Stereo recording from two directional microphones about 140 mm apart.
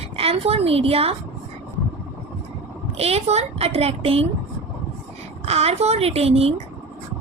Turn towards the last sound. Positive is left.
turn(degrees=-45)  # may be behind; listen again after turning